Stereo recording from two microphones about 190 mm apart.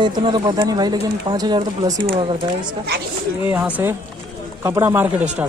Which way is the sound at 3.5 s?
10° right (ahead or behind).